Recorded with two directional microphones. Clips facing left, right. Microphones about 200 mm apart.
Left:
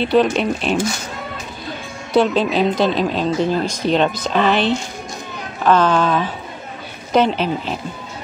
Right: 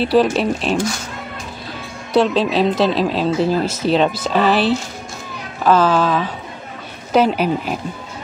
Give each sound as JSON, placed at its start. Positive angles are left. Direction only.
{"t": 0.0, "sound": "speech", "side_deg": -5}
{"t": 2.1, "sound": "speech", "side_deg": 0}